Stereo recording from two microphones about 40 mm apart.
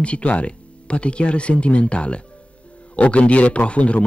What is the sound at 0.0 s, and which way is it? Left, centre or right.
Speech, left.